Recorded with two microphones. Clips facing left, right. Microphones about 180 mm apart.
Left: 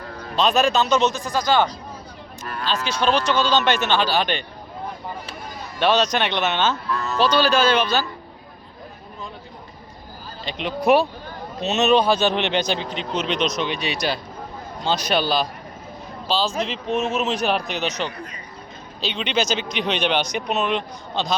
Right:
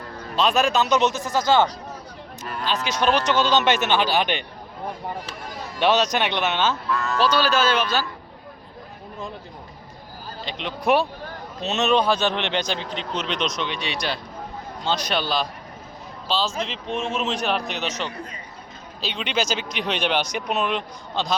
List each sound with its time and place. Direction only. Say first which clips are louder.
0.3 s speech: left 1 dB; 5° right (ahead or behind)
0.9 s speech: left 1 dB; 15° right (ahead or behind)
2.4 s speech: left 1 dB; 15° right (ahead or behind)
5.8 s speech: left 1 dB; 15° right (ahead or behind)
10.4 s speech: left 4 dB; 5° left (ahead or behind)